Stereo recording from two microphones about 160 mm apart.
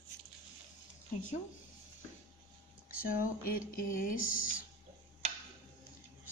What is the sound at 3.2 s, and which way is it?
Music, 60° left (ahead or behind).